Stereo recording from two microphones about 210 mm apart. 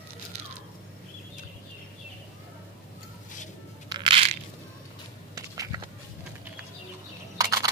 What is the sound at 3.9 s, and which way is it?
Crushing, 25° right (ahead or behind).